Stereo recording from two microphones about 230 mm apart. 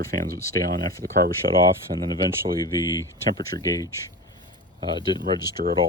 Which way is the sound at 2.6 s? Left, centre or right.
Centre.